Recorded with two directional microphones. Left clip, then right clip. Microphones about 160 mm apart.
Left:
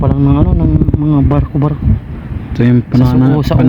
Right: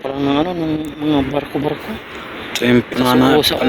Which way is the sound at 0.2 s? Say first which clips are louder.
Left 3 dB; 90° left.